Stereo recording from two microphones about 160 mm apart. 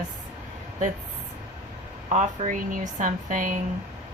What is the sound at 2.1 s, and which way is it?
A woman's voice, 50° right (ahead or behind).